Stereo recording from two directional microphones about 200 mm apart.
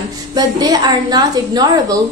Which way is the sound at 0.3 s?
20° right (ahead or behind).